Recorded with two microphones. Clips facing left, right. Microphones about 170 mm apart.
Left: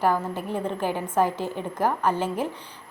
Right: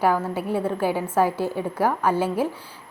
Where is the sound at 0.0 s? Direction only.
10° right (ahead or behind).